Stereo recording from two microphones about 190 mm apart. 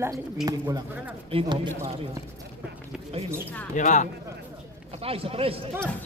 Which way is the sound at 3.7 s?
40° left (ahead or behind).